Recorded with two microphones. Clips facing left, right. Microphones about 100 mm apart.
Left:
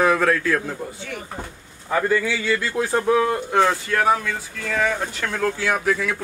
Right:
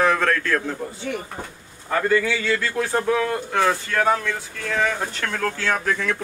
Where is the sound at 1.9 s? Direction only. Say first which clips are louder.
Even; 10° left (ahead or behind).